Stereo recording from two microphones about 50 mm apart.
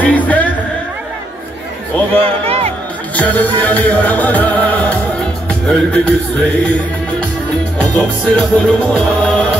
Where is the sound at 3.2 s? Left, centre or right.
Left.